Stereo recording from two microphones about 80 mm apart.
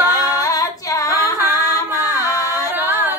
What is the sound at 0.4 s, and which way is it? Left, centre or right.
Female singing, left.